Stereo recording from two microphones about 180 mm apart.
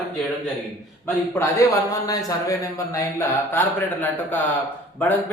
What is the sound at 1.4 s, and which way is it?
Speech, 20° left (ahead or behind).